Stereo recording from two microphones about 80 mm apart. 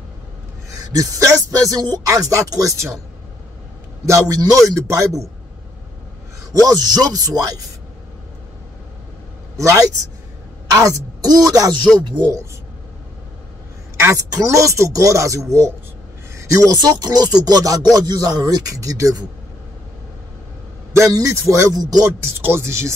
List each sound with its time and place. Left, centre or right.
0.7 s speech: right
4.0 s speech: right
6.8 s speech: right
9.6 s speech: right
10.8 s speech: right
12.0 s speech: right
13.9 s a sound: right
14.3 s speech: right
16.3 s a sound: right
16.8 s speech: right
21.1 s speech: right
22.2 s speech: right